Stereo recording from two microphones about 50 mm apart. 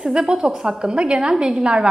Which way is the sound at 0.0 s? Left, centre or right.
Centre.